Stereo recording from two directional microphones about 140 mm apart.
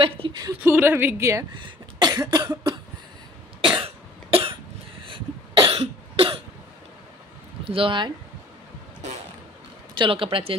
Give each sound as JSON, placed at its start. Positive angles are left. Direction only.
{"t": 0.0, "sound": "speech", "side_deg": -40}
{"t": 0.7, "sound": "a woman's voice", "side_deg": -15}
{"t": 1.5, "sound": "cough", "side_deg": -35}
{"t": 5.0, "sound": "cough", "side_deg": -35}
{"t": 7.6, "sound": "speech", "side_deg": -40}
{"t": 9.9, "sound": "speech", "side_deg": -40}